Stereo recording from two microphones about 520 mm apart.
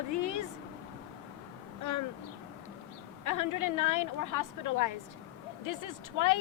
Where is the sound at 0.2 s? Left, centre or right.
Left.